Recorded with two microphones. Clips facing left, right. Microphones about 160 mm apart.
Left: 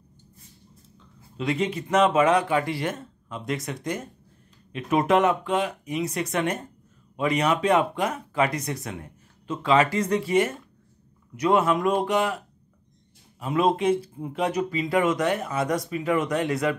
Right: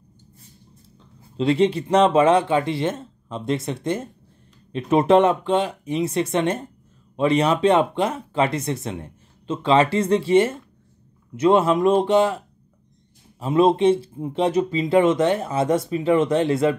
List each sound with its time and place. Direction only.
0.9 s speech: 30° right (ahead or behind)
13.4 s speech: 25° right (ahead or behind)